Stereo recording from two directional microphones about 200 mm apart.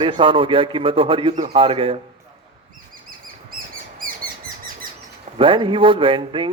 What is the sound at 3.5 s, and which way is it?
Bird, 45° right (ahead or behind).